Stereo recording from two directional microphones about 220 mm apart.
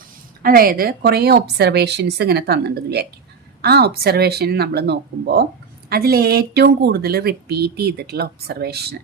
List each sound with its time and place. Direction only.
0.4 s speech: 40° right (ahead or behind)